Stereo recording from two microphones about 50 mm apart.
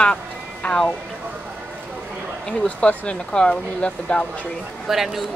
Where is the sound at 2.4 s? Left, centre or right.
Left.